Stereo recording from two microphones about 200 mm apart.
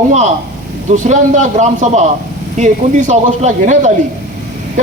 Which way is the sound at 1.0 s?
35° right (ahead or behind).